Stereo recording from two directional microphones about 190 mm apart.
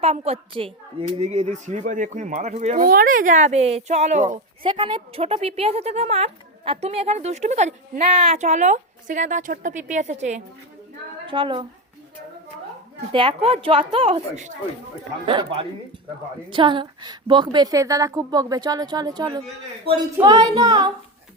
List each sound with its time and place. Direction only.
0.0 s a woman's voice: 35° right (ahead or behind)
4.7 s a woman's voice: 25° right (ahead or behind)
11.3 s a woman's voice: 25° right (ahead or behind)
13.1 s a woman's voice: 30° right (ahead or behind)